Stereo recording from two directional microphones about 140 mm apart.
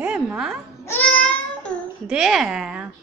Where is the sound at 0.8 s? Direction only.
10° left (ahead or behind).